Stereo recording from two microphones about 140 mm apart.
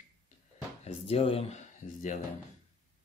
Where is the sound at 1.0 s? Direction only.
45° left (ahead or behind).